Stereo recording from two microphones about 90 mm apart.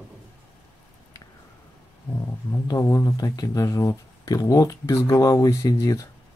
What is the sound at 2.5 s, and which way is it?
Speech, 35° left (ahead or behind).